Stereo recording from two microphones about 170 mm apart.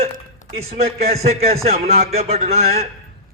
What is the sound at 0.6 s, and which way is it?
Speech, 35° right (ahead or behind).